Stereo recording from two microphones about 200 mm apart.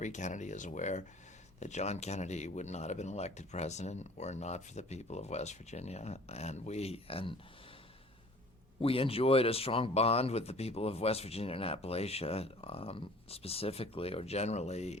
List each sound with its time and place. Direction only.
0.0 s speech: 35° left (ahead or behind)
8.8 s speech: 30° left (ahead or behind)